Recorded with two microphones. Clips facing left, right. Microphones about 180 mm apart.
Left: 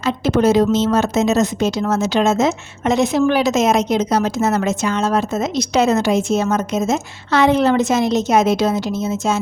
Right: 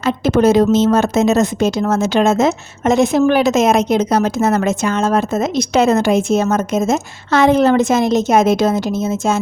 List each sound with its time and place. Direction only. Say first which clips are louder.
0.0 s a woman's voice: right 3 dB; 50° right (ahead or behind)